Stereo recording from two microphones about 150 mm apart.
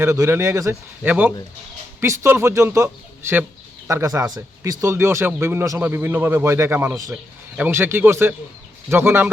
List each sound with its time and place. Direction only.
0.0 s speech: 15° right (ahead or behind)